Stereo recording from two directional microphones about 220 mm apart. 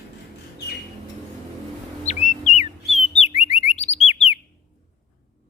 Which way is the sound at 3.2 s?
30° left (ahead or behind).